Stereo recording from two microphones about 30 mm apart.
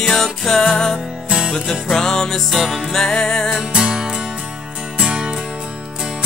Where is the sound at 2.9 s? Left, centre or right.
Centre.